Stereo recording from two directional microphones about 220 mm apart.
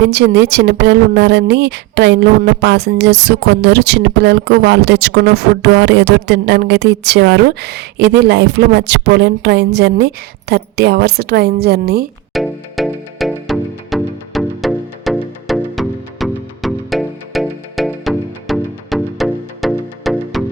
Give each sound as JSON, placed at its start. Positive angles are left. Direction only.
{"t": 0.0, "sound": "a woman's voice", "side_deg": -50}
{"t": 12.3, "sound": "music", "side_deg": 0}